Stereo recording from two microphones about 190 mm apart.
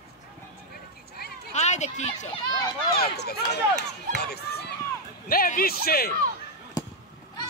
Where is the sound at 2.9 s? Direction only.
55° left (ahead or behind).